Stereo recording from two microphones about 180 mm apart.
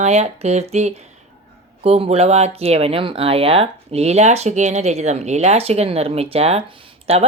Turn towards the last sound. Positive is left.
turn(degrees=-35)  # may be behind; listen again after turning